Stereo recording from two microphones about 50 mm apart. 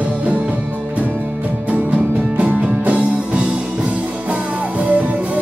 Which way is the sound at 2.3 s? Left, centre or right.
Right.